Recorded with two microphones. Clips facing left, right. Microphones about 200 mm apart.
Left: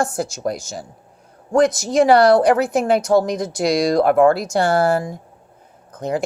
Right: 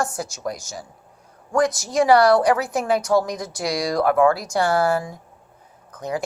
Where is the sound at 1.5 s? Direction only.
25° left (ahead or behind).